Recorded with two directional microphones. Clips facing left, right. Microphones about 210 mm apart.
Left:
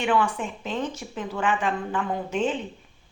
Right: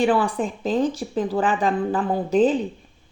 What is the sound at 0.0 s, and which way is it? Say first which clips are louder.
Speech: right 4 dB; 35° right (ahead or behind).